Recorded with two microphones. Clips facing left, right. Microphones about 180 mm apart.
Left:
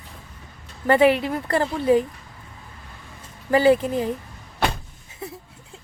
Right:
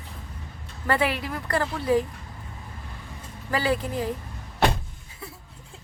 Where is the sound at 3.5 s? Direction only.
25° left (ahead or behind).